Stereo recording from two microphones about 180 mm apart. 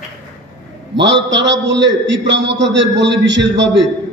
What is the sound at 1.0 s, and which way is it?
A man's voice, 80° right.